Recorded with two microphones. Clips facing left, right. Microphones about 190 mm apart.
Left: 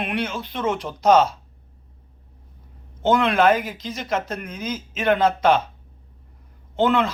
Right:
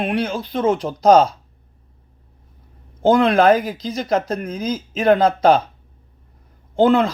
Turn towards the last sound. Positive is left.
turn(degrees=-35)  # may be behind; listen again after turning